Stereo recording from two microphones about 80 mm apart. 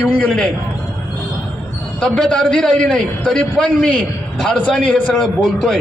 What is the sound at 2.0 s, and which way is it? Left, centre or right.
A man's voice, centre.